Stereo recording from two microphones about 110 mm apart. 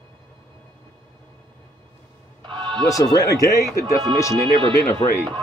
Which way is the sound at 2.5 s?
45° right (ahead or behind).